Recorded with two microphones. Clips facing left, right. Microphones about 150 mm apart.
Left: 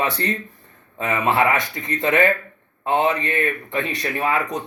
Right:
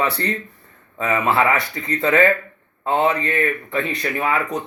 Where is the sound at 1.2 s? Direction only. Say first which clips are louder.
Left 1 dB; 15° left (ahead or behind).